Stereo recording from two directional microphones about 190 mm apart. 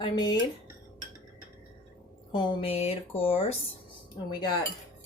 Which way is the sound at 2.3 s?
25° left (ahead or behind).